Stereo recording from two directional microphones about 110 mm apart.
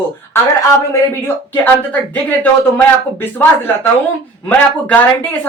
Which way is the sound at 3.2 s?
20° left (ahead or behind).